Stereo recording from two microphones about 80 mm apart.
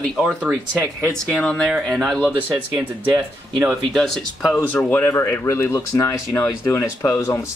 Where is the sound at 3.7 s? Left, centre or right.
Centre.